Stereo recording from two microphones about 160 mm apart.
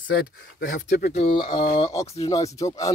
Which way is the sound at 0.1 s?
80° left.